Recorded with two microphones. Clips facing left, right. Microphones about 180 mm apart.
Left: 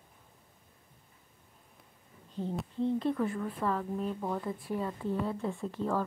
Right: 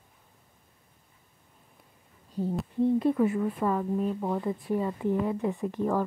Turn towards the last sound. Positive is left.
turn(degrees=-15)  # may be behind; listen again after turning